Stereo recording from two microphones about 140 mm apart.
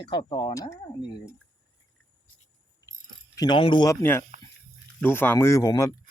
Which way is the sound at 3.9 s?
20° left (ahead or behind).